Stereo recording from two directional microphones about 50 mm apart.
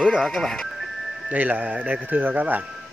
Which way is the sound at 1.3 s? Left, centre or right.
Right.